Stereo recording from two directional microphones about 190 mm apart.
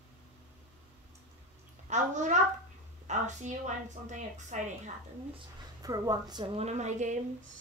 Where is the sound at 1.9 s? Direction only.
40° right (ahead or behind).